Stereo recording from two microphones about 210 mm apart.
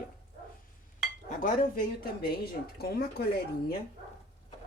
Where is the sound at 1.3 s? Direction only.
40° left (ahead or behind).